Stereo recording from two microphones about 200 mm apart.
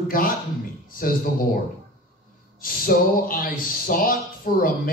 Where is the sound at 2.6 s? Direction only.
45° left (ahead or behind).